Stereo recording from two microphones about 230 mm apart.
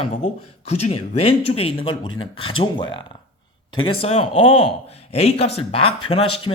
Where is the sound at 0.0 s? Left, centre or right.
Left.